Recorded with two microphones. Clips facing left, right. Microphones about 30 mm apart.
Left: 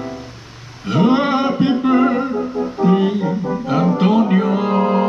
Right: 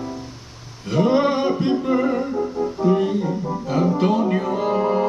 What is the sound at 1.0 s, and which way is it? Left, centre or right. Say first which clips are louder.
Music: left 3 dB; left.